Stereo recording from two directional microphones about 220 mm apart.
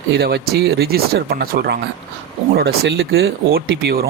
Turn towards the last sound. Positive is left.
turn(degrees=-45)  # may be behind; listen again after turning